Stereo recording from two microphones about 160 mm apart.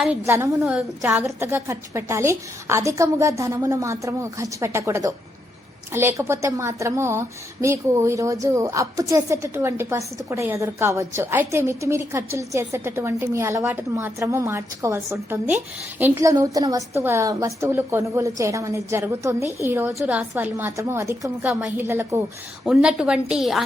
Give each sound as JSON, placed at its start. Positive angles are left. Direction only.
{"t": 0.3, "sound": "a woman's voice", "side_deg": -15}
{"t": 22.6, "sound": "a woman's voice", "side_deg": -5}